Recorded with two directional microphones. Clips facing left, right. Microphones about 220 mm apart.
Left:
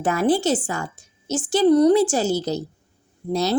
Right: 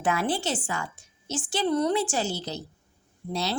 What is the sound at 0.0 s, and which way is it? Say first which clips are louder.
A woman's voice: left 7 dB; 40° left (ahead or behind).